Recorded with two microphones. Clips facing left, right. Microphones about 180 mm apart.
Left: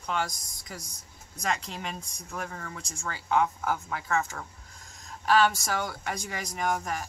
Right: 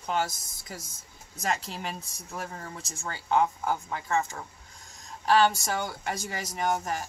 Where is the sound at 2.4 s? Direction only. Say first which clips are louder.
Even; 25° right (ahead or behind).